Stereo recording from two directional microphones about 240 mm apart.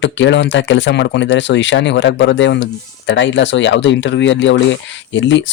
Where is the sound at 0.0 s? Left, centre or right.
Left.